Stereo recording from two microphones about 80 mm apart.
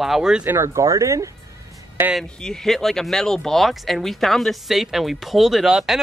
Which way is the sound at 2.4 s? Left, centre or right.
Centre.